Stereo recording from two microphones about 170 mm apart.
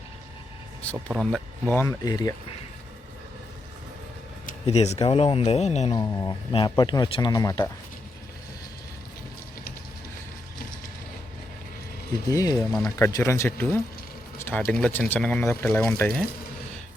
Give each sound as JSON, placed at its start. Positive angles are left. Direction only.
{"t": 1.1, "sound": "speech", "side_deg": -5}
{"t": 1.7, "sound": "speech", "side_deg": 15}
{"t": 4.6, "sound": "speech", "side_deg": 35}
{"t": 5.9, "sound": "speech", "side_deg": 20}
{"t": 12.3, "sound": "speech", "side_deg": 20}
{"t": 14.3, "sound": "a sound", "side_deg": 15}
{"t": 14.6, "sound": "speech", "side_deg": 5}